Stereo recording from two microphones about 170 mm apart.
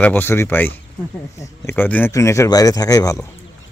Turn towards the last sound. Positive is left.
turn(degrees=20)  # may be behind; listen again after turning